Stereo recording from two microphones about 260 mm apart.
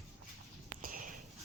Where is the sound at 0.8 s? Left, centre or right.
Right.